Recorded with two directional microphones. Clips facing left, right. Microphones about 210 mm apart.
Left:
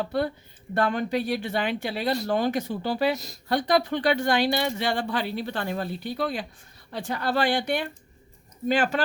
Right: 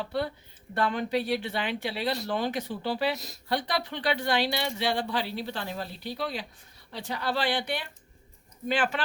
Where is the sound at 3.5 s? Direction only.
45° left (ahead or behind).